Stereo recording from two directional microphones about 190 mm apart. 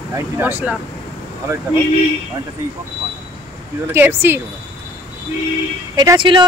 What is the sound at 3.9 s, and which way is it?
Speech, 10° right (ahead or behind).